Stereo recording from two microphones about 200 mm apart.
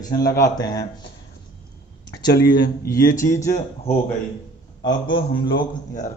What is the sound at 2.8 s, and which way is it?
Speech, 15° left (ahead or behind).